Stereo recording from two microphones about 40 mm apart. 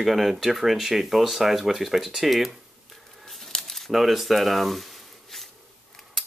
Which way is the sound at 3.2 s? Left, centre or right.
Centre.